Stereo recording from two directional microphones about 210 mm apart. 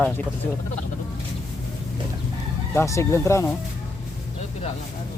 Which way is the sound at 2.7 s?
15° left (ahead or behind).